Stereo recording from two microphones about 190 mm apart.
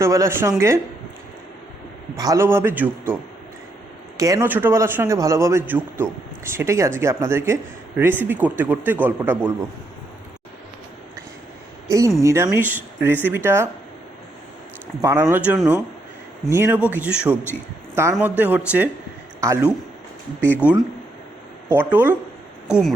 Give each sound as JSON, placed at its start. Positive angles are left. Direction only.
{"t": 0.0, "sound": "a man's voice", "side_deg": -15}
{"t": 2.1, "sound": "a man's voice", "side_deg": -20}
{"t": 4.2, "sound": "a man's voice", "side_deg": -15}
{"t": 11.9, "sound": "a man's voice", "side_deg": -15}
{"t": 15.0, "sound": "a man's voice", "side_deg": -15}
{"t": 20.4, "sound": "speech", "side_deg": 10}
{"t": 21.7, "sound": "a man's voice", "side_deg": -10}